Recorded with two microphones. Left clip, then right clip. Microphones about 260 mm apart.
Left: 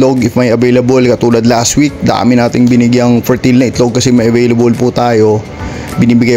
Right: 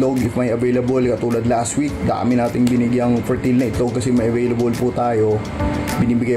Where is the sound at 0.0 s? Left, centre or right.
Left.